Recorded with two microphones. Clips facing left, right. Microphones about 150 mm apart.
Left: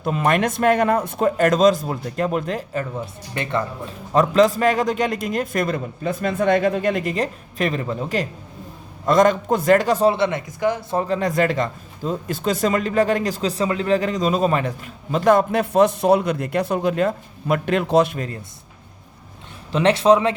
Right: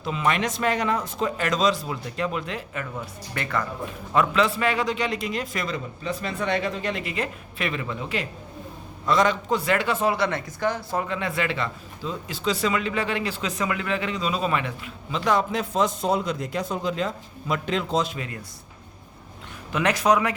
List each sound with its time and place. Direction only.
0.0 s speech: 50° left (ahead or behind)
3.3 s speech: 20° left (ahead or behind)
4.1 s speech: 40° left (ahead or behind)
10.2 s speech: 20° left (ahead or behind)
11.0 s speech: 40° left (ahead or behind); by 18.2 s 60° left (ahead or behind)
19.7 s speech: 30° left (ahead or behind)